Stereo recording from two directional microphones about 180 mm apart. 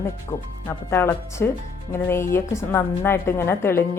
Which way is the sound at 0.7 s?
15° left (ahead or behind).